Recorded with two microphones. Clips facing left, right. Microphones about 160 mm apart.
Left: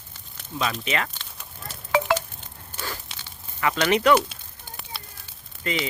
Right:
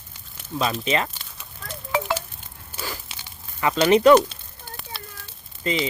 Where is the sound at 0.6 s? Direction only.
30° right (ahead or behind).